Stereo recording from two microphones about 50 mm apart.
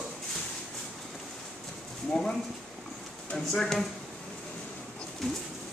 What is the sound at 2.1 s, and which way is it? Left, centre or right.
A man's voice, centre.